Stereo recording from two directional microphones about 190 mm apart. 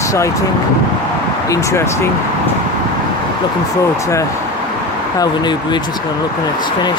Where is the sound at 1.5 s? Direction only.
15° left (ahead or behind).